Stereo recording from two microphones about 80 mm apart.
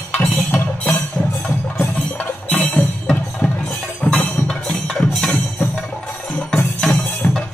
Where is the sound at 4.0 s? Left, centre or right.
Centre.